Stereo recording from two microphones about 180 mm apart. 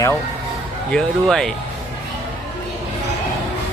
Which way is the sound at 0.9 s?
5° left (ahead or behind).